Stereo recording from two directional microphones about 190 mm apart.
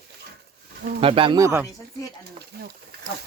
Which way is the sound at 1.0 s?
30° right (ahead or behind).